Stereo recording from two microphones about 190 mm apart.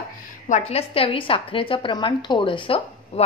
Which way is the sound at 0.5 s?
35° left (ahead or behind).